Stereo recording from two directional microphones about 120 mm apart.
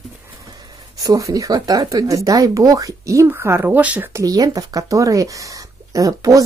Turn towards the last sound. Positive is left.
turn(degrees=-30)  # may be behind; listen again after turning